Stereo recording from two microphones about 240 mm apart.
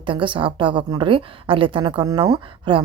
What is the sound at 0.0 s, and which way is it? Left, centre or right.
A woman's voice, right.